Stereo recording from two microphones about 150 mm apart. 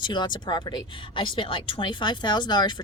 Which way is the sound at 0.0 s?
30° left (ahead or behind).